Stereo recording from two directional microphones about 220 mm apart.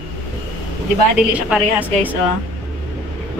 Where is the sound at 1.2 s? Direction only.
5° right (ahead or behind).